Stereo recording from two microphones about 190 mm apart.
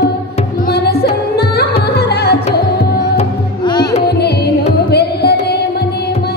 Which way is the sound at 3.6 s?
25° left (ahead or behind).